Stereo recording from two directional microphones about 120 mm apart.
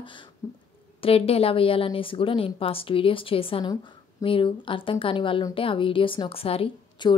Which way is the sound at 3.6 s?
30° left (ahead or behind).